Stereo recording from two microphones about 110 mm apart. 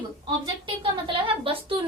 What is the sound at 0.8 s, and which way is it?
A woman's voice, 55° right (ahead or behind).